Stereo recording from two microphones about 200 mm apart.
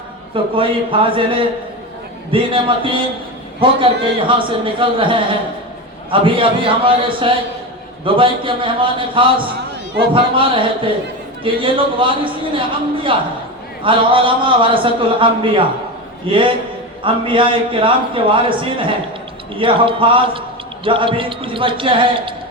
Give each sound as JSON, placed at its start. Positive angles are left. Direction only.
{"t": 0.5, "sound": "a man's voice", "side_deg": -25}